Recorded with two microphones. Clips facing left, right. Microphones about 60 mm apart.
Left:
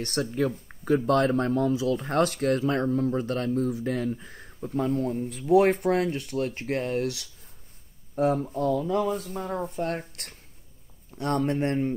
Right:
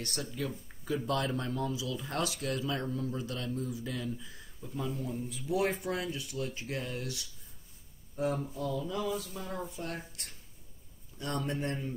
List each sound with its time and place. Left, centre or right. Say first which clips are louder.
0.0 s speech: left 10 dB; left